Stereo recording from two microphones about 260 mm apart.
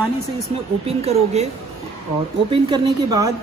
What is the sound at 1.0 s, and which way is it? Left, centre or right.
Speech, right.